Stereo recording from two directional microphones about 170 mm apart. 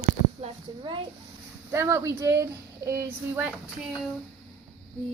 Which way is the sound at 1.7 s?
15° right (ahead or behind).